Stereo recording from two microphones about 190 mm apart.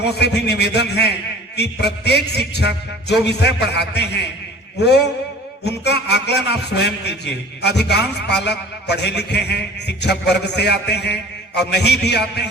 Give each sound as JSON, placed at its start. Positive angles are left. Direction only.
{"t": 0.0, "sound": "a man's voice", "side_deg": 60}